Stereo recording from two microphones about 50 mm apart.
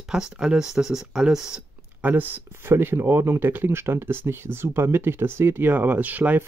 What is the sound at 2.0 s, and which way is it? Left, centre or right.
Speech, right.